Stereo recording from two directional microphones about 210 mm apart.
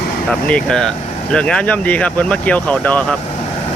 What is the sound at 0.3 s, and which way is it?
Speech, 5° left (ahead or behind).